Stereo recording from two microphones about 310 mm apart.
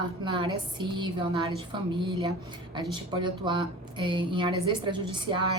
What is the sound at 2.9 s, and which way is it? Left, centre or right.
A woman's voice, centre.